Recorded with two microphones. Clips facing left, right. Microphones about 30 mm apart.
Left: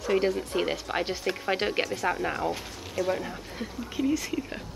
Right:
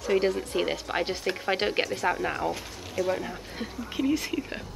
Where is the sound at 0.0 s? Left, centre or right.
Centre.